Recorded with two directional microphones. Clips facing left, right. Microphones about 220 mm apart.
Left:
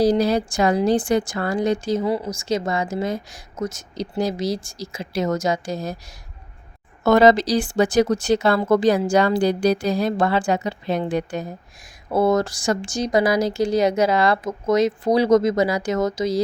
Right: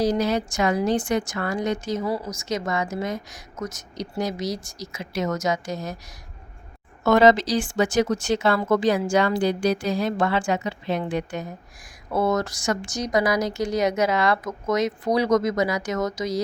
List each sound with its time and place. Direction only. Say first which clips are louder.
0.0 s speech: left 4 dB; 35° left (ahead or behind)
7.0 s speech: left 2 dB; 35° left (ahead or behind)